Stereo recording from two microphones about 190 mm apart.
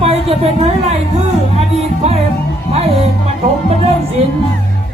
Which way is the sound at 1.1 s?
35° right (ahead or behind).